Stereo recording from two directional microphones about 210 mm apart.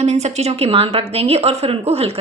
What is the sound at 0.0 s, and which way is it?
A woman's voice, 30° right (ahead or behind).